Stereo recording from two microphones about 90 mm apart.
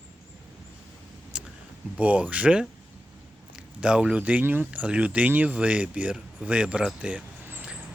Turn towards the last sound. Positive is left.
turn(degrees=-10)  # may be behind; listen again after turning